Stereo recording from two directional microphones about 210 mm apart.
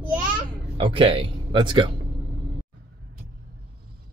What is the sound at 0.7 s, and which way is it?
Speech, 25° right (ahead or behind).